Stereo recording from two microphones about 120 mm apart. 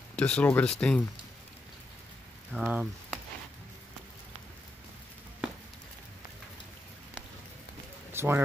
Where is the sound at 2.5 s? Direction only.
10° right (ahead or behind).